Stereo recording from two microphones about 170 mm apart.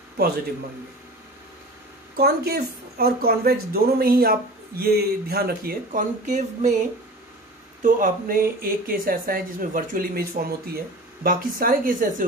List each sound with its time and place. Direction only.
2.1 s a woman's voice: 65° right (ahead or behind); by 6.7 s 45° right (ahead or behind)
7.8 s a woman's voice: 55° right (ahead or behind)